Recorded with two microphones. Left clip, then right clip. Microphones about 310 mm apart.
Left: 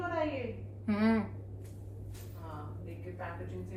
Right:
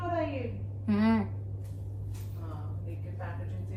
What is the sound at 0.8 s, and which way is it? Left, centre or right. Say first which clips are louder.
Speech: right 2 dB; centre.